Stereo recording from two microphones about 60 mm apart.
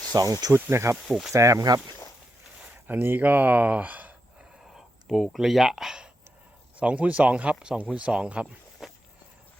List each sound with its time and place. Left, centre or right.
0.1 s speech: right
0.5 s speech: right
1.0 s speech: centre
1.3 s speech: right
2.8 s speech: right
4.7 s speech: centre
6.7 s speech: right
8.8 s walk: centre